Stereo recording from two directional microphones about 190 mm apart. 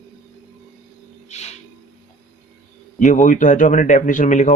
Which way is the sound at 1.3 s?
35° left (ahead or behind).